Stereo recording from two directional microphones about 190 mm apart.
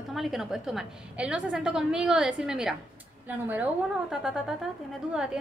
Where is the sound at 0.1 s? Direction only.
Centre (ahead or behind).